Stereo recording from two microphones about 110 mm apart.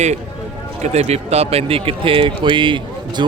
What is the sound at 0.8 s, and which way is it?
Speech, 80° right.